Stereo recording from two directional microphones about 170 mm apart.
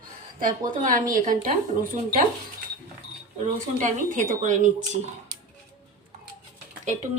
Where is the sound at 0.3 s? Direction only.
55° right (ahead or behind).